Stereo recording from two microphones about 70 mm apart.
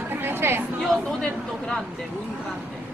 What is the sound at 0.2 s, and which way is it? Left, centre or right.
Chatter, right.